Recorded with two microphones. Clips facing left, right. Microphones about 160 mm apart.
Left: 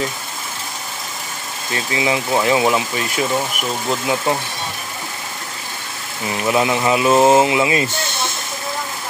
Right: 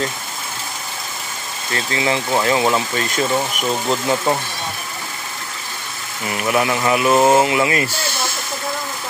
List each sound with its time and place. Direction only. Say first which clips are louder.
1.7 s speech: even; 15° left (ahead or behind)
6.4 s speech: left 1 dB; 20° left (ahead or behind)